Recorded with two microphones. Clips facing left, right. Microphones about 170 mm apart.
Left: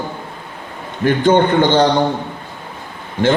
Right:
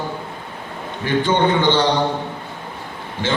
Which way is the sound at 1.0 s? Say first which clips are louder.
Left 5 dB; 55° left (ahead or behind).